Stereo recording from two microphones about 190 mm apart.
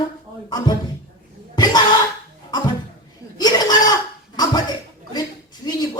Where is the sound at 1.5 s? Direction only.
20° left (ahead or behind).